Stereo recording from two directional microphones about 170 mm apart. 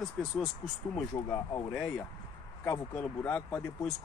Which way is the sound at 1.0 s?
20° left (ahead or behind).